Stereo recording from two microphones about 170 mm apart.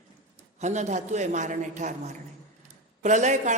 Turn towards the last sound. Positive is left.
turn(degrees=-45)  # may be behind; listen again after turning